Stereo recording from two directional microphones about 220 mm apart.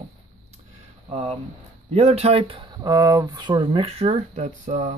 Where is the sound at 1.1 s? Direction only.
25° right (ahead or behind).